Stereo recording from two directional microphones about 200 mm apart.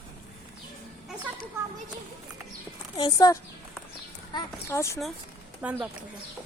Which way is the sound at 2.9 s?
20° left (ahead or behind).